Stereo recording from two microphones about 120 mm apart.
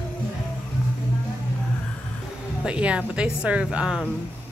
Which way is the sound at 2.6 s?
10° right (ahead or behind).